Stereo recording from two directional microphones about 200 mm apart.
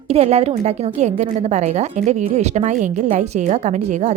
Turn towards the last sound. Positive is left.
turn(degrees=-35)  # may be behind; listen again after turning